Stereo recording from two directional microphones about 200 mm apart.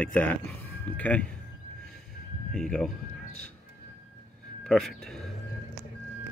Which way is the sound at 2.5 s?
5° left (ahead or behind).